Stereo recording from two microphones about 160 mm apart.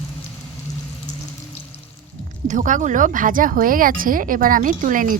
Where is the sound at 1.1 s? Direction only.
45° left (ahead or behind).